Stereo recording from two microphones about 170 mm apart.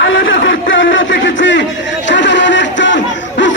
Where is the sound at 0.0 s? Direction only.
85° left.